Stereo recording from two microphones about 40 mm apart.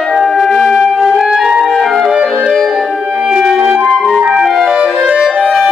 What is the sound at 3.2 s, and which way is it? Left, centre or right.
Music, centre.